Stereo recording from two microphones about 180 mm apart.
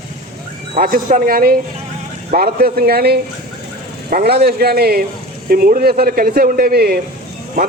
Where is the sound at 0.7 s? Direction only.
55° right (ahead or behind).